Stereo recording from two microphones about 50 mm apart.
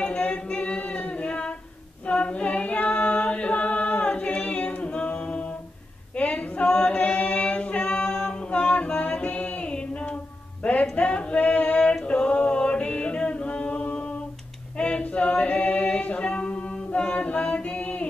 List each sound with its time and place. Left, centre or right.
0.0 s singing: left
2.0 s chant: left
6.1 s choir: left
8.5 s music: left
10.6 s female singing: left
11.9 s singing: centre
14.8 s choir: left